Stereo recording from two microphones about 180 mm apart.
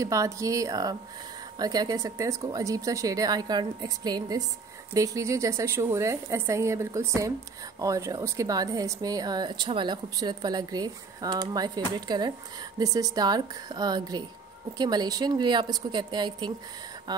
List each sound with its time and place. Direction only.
0.0 s a woman's voice: 20° right (ahead or behind)